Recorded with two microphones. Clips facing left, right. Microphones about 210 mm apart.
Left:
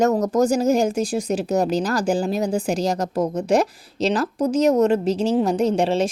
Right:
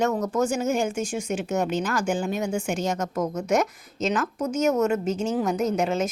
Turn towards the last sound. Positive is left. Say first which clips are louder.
# left 5 dB
turn(degrees=30)  # may be behind; listen again after turning